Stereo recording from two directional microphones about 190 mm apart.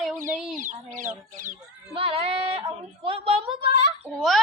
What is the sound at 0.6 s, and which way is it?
Speech, 45° right (ahead or behind).